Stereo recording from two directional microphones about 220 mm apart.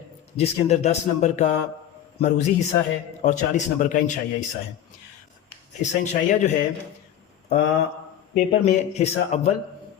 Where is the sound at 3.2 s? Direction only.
35° left (ahead or behind).